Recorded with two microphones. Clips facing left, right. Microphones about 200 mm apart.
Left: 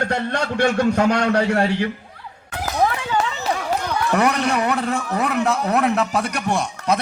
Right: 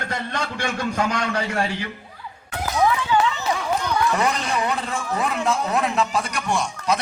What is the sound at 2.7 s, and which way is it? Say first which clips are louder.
Run: right 1 dB; 40° left (ahead or behind).